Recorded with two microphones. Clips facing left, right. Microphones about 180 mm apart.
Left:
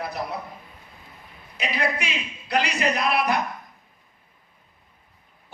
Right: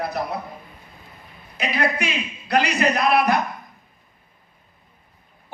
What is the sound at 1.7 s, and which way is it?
A man's voice, 50° right (ahead or behind).